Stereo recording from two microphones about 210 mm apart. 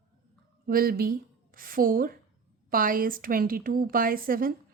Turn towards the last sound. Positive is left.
turn(degrees=-40)  # may be behind; listen again after turning